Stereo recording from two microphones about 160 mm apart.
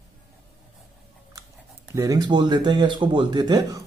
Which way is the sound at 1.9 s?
20° right (ahead or behind).